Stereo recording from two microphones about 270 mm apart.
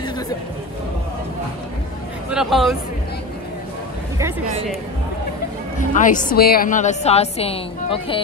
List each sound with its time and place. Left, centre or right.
2.3 s speech: centre
5.9 s a woman's voice: left